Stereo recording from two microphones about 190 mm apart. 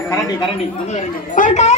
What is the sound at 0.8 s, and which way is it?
Speech, 40° left (ahead or behind).